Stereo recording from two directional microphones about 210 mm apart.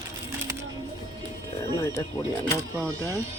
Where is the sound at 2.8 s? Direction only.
15° right (ahead or behind).